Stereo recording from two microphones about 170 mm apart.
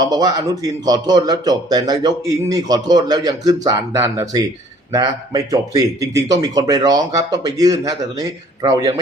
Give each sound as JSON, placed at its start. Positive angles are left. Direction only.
{"t": 0.0, "sound": "a man's voice", "side_deg": -20}